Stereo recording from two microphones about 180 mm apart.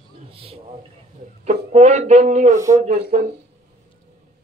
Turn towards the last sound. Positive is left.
turn(degrees=-35)  # may be behind; listen again after turning